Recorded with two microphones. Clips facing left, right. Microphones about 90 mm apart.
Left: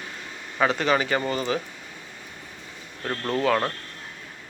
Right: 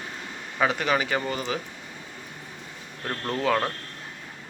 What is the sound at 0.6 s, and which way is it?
Speech, 10° right (ahead or behind).